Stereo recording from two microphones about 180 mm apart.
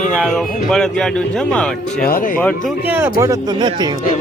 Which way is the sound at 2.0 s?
50° left (ahead or behind).